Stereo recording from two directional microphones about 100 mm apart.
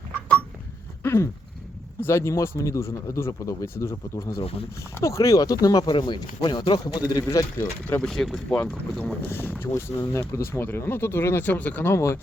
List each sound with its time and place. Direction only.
1.0 s a sound: 25° left (ahead or behind)
2.0 s speech: 25° left (ahead or behind)
4.4 s speech: 70° left (ahead or behind)
4.8 s speech: 30° left (ahead or behind)
7.6 s speech: 20° left (ahead or behind)
8.0 s speech: 5° left (ahead or behind)
8.5 s speech: 15° left (ahead or behind)